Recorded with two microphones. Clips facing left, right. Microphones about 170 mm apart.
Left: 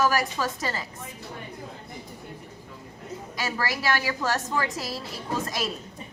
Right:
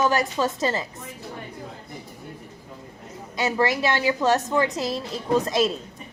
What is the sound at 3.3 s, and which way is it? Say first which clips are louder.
A woman's voice: right 8 dB; 20° right (ahead or behind).